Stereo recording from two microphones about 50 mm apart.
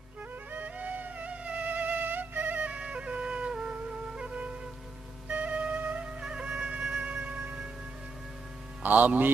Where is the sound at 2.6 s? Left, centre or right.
Right.